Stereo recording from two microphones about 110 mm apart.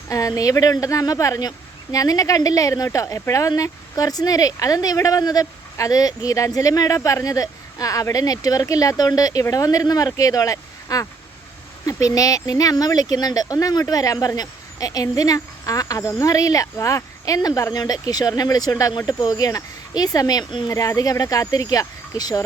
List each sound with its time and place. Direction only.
0.1 s speech: 30° left (ahead or behind)